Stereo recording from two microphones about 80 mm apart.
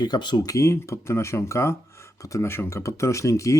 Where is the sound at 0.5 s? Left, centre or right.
Left.